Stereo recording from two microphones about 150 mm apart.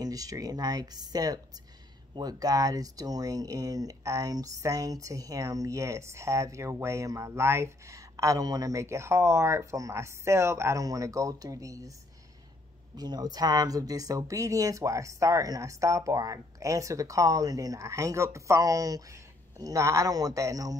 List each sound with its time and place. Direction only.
0.0 s speech: 25° right (ahead or behind)
12.9 s speech: 25° right (ahead or behind)